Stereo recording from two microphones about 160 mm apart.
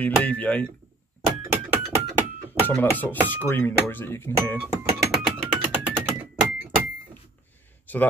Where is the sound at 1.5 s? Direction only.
15° right (ahead or behind).